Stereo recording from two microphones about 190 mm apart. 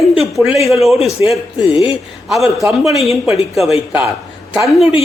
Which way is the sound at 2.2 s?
Centre (ahead or behind).